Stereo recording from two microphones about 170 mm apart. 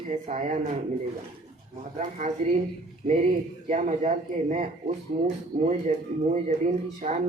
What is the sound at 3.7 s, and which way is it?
A woman's voice, 45° right (ahead or behind).